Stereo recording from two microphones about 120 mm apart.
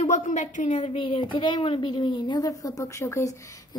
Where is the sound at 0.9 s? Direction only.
45° left (ahead or behind).